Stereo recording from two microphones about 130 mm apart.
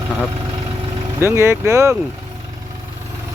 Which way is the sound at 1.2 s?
20° right (ahead or behind).